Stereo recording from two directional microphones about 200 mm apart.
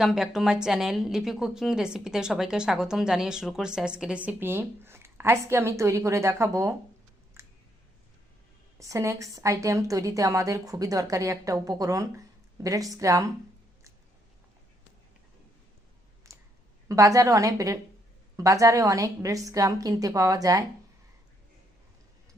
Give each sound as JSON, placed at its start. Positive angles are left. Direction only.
{"t": 0.0, "sound": "a woman's voice", "side_deg": 0}
{"t": 7.4, "sound": "clicking", "side_deg": -15}
{"t": 8.8, "sound": "a woman's voice", "side_deg": -15}
{"t": 16.3, "sound": "clicking", "side_deg": -15}
{"t": 16.9, "sound": "a woman's voice", "side_deg": -15}